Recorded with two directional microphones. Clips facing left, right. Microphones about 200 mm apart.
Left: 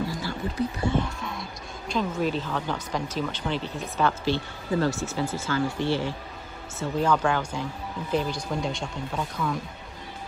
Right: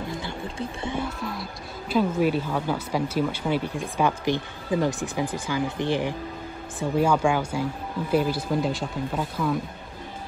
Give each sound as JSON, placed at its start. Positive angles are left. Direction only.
{"t": 0.1, "sound": "speech", "side_deg": -25}
{"t": 0.9, "sound": "music", "side_deg": -5}
{"t": 1.9, "sound": "speech", "side_deg": -10}